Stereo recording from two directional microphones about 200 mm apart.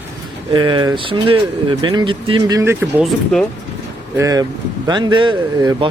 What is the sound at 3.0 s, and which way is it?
Speech, centre (ahead or behind).